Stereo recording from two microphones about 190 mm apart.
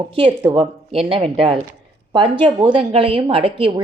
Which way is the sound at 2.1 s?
25° right (ahead or behind).